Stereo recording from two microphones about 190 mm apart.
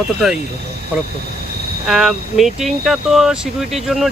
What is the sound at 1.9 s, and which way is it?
Speech, centre (ahead or behind).